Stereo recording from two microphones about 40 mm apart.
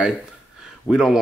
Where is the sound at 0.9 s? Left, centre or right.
Centre.